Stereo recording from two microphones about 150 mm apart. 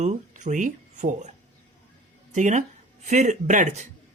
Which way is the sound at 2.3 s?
55° right (ahead or behind).